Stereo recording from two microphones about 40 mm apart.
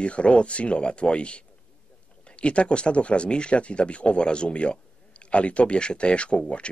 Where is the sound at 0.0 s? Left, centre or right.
Left.